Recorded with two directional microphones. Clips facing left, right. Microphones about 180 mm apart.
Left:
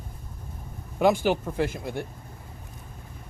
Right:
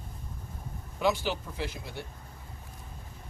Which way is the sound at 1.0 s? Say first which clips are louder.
Left 7 dB; 50° left (ahead or behind).